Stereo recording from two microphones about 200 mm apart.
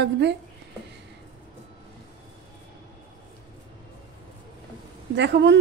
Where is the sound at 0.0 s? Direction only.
60° right (ahead or behind).